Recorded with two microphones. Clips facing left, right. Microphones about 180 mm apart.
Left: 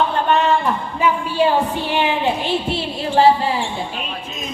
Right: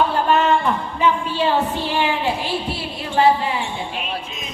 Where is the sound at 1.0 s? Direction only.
10° left (ahead or behind).